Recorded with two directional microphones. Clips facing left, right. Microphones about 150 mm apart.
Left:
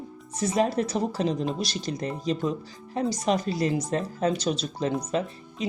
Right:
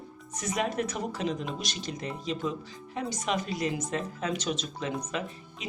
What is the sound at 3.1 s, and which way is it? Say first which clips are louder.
Speech: left 4 dB; 35° left (ahead or behind).